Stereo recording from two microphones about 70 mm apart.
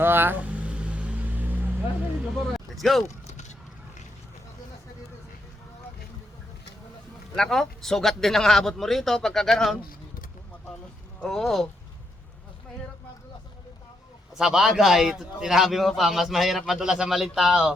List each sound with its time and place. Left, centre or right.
0.0 s vehicle: right
0.4 s dog: centre
2.2 s a sound: centre
7.3 s speech: centre
11.2 s speech: centre
14.3 s speech: centre